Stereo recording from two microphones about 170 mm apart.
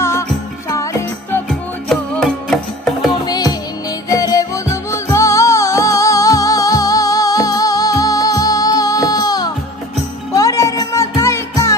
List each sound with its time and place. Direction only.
0.0 s music: 15° left (ahead or behind)
1.5 s music: centre (ahead or behind)
3.2 s music: 25° left (ahead or behind)